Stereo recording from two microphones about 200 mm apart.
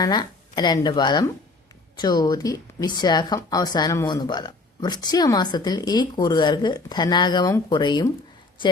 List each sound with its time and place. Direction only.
0.0 s speech: 20° left (ahead or behind)